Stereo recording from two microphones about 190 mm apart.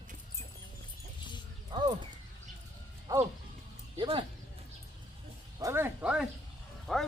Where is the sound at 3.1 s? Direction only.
15° right (ahead or behind).